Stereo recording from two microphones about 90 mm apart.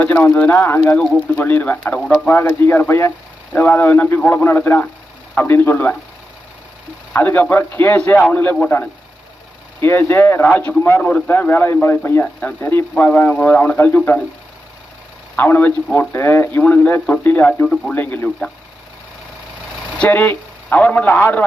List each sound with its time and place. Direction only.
0.2 s a man's voice: 25° left (ahead or behind)
7.1 s a man's voice: 20° left (ahead or behind)
9.8 s a man's voice: 25° left (ahead or behind)
12.2 s a man's voice: 15° left (ahead or behind)
15.4 s a man's voice: 20° left (ahead or behind)
20.0 s a man's voice: 20° left (ahead or behind)